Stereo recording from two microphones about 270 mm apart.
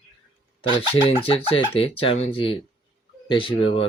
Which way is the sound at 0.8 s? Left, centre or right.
Centre.